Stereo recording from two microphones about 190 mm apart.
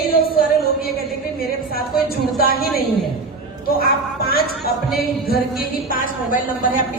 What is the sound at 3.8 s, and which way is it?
Speech, 55° left (ahead or behind).